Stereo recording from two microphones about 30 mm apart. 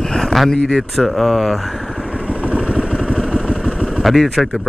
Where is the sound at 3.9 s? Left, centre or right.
Centre.